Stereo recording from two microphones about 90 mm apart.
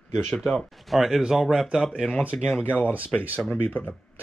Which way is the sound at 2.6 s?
20° left (ahead or behind).